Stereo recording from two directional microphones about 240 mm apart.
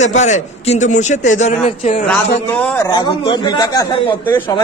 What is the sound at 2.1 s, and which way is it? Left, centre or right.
A man's voice, centre.